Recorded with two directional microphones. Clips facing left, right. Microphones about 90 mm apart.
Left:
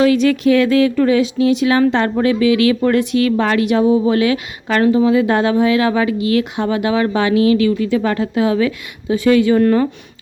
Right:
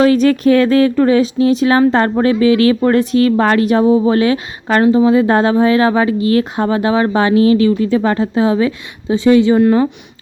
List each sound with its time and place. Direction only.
0.0 s speech: 40° right (ahead or behind); by 9.9 s 20° right (ahead or behind)